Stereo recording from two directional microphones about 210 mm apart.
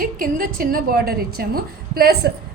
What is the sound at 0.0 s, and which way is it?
A woman's voice, 40° right (ahead or behind).